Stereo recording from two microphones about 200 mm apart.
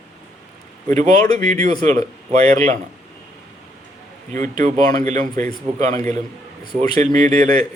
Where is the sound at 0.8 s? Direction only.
35° right (ahead or behind).